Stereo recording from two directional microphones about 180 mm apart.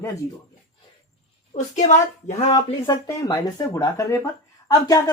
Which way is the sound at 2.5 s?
20° left (ahead or behind).